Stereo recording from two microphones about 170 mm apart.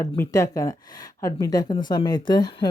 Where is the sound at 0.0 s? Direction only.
15° left (ahead or behind).